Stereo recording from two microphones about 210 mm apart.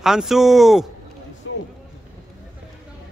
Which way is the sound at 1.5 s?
65° left (ahead or behind).